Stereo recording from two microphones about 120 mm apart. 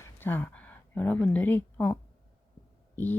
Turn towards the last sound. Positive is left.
turn(degrees=15)  # may be behind; listen again after turning